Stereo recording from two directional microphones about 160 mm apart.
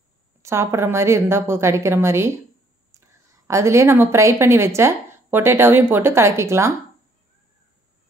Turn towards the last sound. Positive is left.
turn(degrees=-15)  # may be behind; listen again after turning